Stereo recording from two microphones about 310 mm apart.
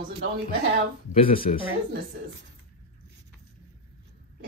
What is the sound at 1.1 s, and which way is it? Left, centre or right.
Speech, centre.